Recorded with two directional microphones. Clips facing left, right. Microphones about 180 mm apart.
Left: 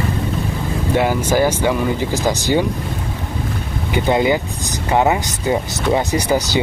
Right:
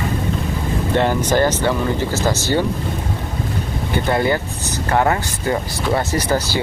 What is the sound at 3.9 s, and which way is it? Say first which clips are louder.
Speech: left 2 dB; 15° left (ahead or behind).